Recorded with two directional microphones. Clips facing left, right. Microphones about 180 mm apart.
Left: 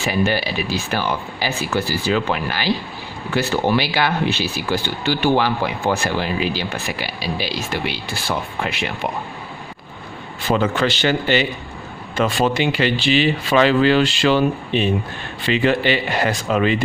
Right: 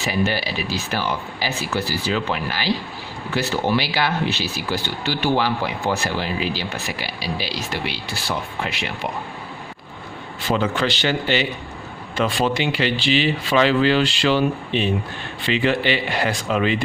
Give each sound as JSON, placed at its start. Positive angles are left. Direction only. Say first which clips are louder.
{"t": 0.0, "sound": "speech", "louder": "left 3 dB", "side_deg": 55}
{"t": 10.5, "sound": "speech", "louder": "left 3 dB", "side_deg": 50}